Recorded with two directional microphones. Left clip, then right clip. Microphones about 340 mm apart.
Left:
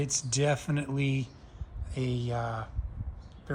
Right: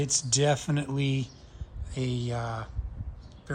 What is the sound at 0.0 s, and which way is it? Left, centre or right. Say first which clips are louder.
Speech: right 3 dB; centre.